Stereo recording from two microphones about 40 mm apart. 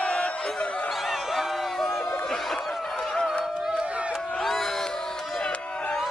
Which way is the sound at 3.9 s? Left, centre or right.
Right.